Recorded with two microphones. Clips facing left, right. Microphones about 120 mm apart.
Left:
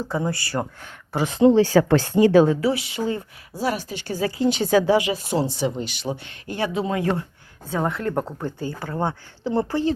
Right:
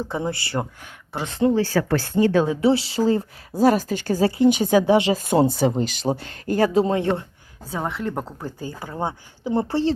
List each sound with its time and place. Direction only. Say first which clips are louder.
0.1 s speech: left 1 dB; 20° right (ahead or behind)
1.1 s speech: left 4 dB; 10° left (ahead or behind)
2.6 s speech: right 4 dB; 30° right (ahead or behind); by 4.3 s 45° right (ahead or behind)
4.3 s speech: right 1 dB; 20° right (ahead or behind)
5.1 s speech: right 5 dB; 50° right (ahead or behind); by 7.3 s 25° right (ahead or behind)
7.8 s speech: left 3 dB; centre (ahead or behind); by 9.9 s 25° right (ahead or behind)